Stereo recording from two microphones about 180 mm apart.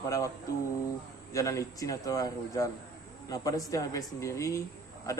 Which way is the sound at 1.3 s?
15° left (ahead or behind).